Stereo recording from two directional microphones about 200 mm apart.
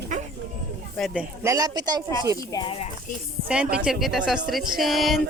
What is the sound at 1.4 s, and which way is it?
Speech, 15° right (ahead or behind).